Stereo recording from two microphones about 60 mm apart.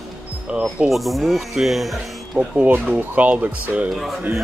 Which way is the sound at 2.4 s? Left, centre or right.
Centre.